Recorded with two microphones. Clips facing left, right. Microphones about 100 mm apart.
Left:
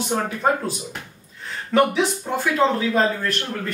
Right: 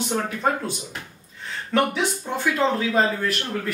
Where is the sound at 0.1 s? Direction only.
10° left (ahead or behind).